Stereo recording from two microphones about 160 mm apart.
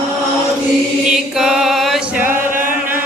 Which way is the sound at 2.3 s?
55° right (ahead or behind).